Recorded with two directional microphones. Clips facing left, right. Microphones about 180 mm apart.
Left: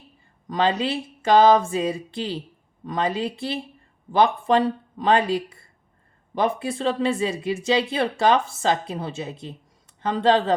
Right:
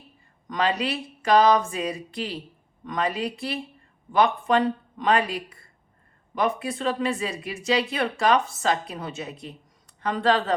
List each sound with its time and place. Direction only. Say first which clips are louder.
0.4 s speech: left 3 dB; 30° left (ahead or behind)